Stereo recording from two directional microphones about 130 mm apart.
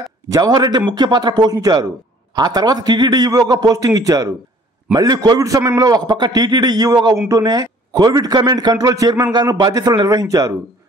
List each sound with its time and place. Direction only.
0.3 s a man's voice: 30° right (ahead or behind)